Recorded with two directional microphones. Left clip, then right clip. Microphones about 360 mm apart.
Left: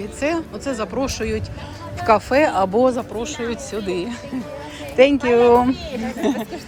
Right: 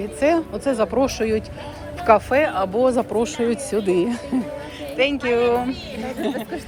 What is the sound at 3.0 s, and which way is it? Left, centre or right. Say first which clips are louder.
Speech: right 5 dB; centre.